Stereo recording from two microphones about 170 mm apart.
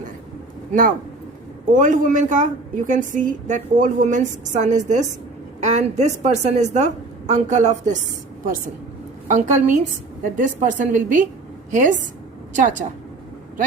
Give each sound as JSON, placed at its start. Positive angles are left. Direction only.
{"t": 0.7, "sound": "a woman's voice", "side_deg": -55}
{"t": 9.2, "sound": "a woman's voice", "side_deg": -50}